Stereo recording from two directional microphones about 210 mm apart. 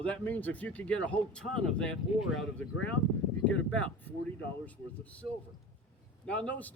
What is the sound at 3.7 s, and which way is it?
A man's voice, 5° left (ahead or behind).